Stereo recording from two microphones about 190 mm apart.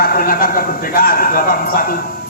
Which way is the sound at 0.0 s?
50° left (ahead or behind).